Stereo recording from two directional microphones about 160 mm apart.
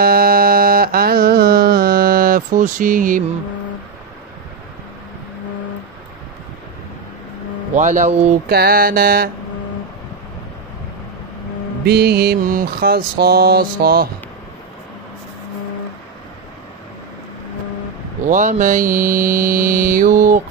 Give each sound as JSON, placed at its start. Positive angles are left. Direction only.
{"t": 0.0, "sound": "music", "side_deg": -65}
{"t": 7.7, "sound": "speech", "side_deg": -50}
{"t": 8.5, "sound": "mantra", "side_deg": -75}
{"t": 11.8, "sound": "mantra", "side_deg": -80}
{"t": 18.2, "sound": "mantra", "side_deg": -50}